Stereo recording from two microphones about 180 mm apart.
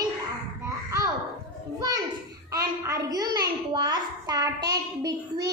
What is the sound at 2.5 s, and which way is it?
A child's voice, 20° right (ahead or behind).